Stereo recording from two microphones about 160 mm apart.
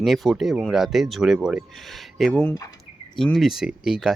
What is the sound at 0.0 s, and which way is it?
Speech, centre (ahead or behind).